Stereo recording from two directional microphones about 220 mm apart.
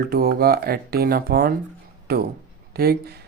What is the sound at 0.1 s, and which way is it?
Speech, 45° right (ahead or behind).